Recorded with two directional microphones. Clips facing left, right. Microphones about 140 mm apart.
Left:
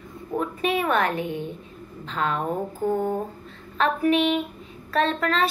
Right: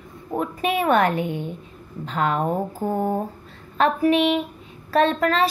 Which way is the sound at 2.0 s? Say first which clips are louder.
Right 4 dB; 40° right (ahead or behind).